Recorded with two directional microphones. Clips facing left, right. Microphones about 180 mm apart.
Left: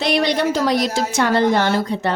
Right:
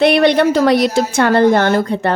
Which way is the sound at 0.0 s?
60° right (ahead or behind).